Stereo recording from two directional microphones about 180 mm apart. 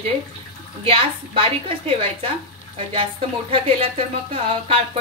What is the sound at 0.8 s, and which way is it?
Speech, 30° right (ahead or behind).